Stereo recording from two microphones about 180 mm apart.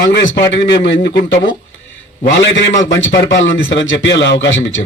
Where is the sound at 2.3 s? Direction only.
90° left.